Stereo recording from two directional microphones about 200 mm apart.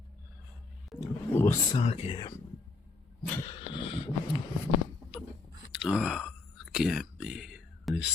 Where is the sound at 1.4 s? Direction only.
10° left (ahead or behind).